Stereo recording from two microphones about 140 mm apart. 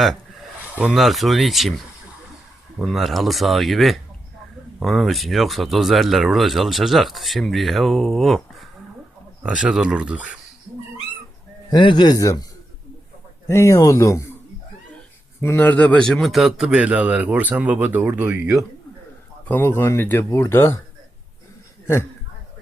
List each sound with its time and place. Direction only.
0.0 s a sound: centre (ahead or behind)
0.6 s a sound: 10° right (ahead or behind)
0.9 s a man's voice: centre (ahead or behind)
11.7 s speech: 35° left (ahead or behind)
13.5 s speech: 20° left (ahead or behind)
15.4 s a man's voice: 15° left (ahead or behind); by 18.6 s 10° right (ahead or behind)
19.5 s speech: 15° left (ahead or behind)